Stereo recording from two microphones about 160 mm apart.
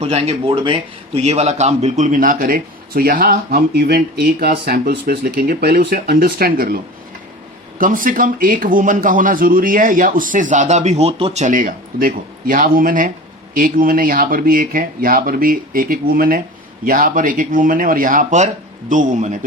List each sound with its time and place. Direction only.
0.0 s a man's voice: 40° right (ahead or behind); by 6.7 s 70° right (ahead or behind)
7.8 s a man's voice: 55° right (ahead or behind)